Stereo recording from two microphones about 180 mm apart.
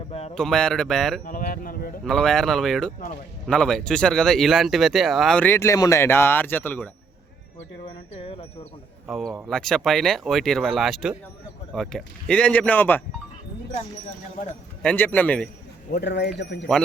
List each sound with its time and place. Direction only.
0.1 s a sound: 35° left (ahead or behind)
0.3 s speech: 5° left (ahead or behind)
1.2 s speech: 50° left (ahead or behind)
2.0 s speech: 5° left (ahead or behind)
7.9 s a sound: 30° left (ahead or behind)
9.0 s speech: centre (ahead or behind)
14.8 s speech: 10° left (ahead or behind)
15.9 s speech: 70° left (ahead or behind)